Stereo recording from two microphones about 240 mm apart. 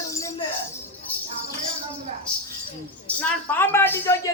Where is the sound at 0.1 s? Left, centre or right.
Centre.